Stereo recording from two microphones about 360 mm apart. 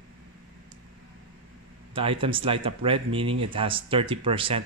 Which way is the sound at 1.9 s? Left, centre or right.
Centre.